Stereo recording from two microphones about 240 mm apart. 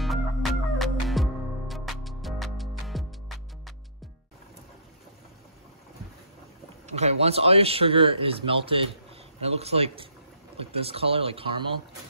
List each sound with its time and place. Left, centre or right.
0.0 s music: centre
7.0 s speech: right